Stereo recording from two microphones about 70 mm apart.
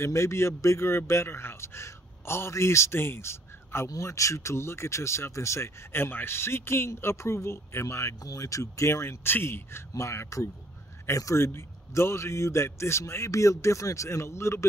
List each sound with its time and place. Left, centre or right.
0.0 s speech: left
8.2 s a man's voice: left